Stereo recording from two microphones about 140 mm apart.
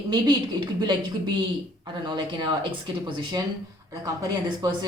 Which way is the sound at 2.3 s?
35° right (ahead or behind).